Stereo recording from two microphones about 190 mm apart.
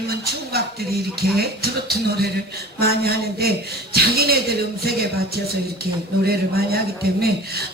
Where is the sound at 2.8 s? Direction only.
55° right (ahead or behind).